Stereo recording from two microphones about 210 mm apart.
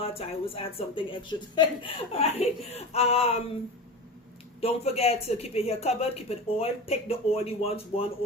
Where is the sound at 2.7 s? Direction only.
30° left (ahead or behind).